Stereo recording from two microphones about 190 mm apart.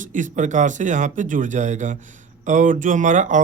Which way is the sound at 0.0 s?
40° right (ahead or behind).